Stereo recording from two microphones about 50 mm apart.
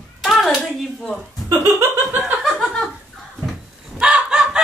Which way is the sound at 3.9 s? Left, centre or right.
Centre.